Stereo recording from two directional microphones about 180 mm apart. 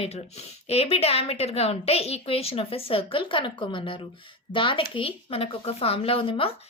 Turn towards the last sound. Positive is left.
turn(degrees=30)  # may be behind; listen again after turning